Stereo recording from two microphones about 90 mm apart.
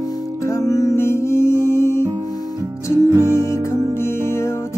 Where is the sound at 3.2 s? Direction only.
30° left (ahead or behind).